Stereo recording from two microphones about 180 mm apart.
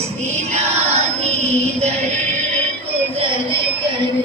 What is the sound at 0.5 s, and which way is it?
Child singing, 35° right (ahead or behind).